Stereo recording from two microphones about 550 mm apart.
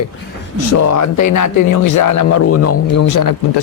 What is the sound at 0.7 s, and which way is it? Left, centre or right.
Speech, left.